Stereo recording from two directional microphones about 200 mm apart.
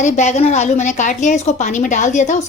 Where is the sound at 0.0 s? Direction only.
35° left (ahead or behind).